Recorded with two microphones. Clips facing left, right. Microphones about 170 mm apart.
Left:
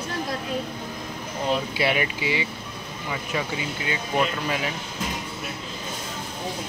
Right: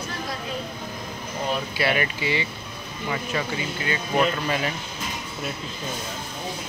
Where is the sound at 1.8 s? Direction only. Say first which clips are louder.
Even; 15° left (ahead or behind).